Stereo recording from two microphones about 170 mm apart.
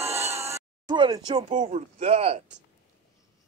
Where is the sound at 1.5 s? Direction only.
45° right (ahead or behind).